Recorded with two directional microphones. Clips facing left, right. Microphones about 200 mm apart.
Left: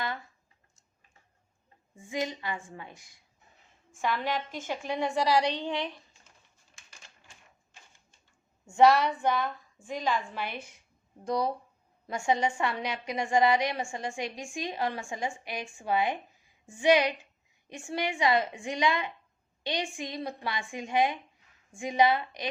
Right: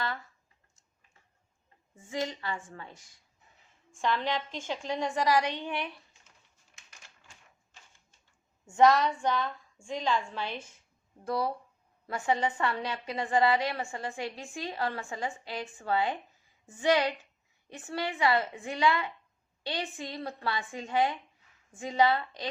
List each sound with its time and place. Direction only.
2.0 s a woman's voice: 15° left (ahead or behind)
8.8 s a woman's voice: 10° left (ahead or behind)